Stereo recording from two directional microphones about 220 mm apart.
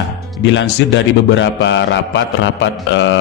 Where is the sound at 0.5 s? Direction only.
55° left (ahead or behind).